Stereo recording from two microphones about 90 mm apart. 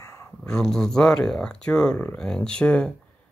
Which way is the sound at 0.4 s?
10° left (ahead or behind).